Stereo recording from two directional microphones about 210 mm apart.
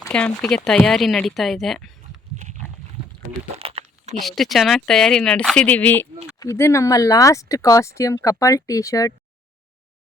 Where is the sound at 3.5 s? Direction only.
30° right (ahead or behind).